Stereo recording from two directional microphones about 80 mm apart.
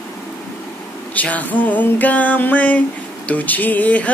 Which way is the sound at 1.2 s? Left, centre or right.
Centre.